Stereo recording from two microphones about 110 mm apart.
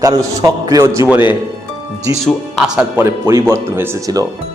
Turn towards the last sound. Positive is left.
turn(degrees=-25)  # may be behind; listen again after turning